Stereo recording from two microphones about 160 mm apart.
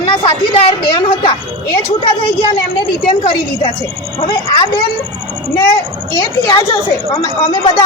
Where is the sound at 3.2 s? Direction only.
35° left (ahead or behind).